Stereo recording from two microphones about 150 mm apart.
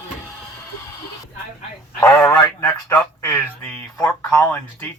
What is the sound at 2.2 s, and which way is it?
Speech, 10° left (ahead or behind).